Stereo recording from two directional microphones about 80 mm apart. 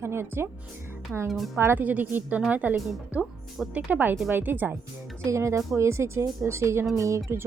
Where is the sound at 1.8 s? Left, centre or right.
Centre.